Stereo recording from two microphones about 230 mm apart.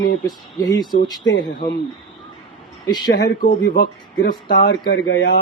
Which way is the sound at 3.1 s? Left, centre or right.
Left.